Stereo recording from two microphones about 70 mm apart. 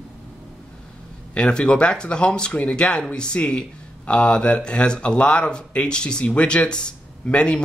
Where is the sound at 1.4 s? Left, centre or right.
Centre.